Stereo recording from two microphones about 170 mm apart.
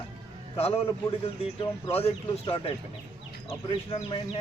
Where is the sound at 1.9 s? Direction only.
35° left (ahead or behind).